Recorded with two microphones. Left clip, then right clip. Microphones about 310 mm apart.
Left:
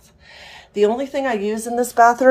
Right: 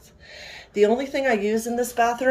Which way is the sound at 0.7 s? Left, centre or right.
Centre.